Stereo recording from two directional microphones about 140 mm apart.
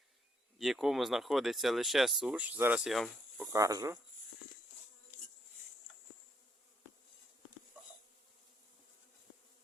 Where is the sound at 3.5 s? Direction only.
25° right (ahead or behind).